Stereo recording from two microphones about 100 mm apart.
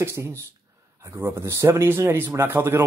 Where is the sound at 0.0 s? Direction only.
25° right (ahead or behind).